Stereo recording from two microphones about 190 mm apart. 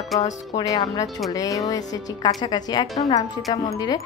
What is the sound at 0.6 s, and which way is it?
A woman's voice, 20° left (ahead or behind).